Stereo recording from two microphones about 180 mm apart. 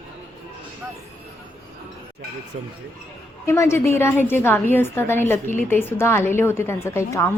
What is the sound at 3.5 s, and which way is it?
A woman's voice, 15° left (ahead or behind).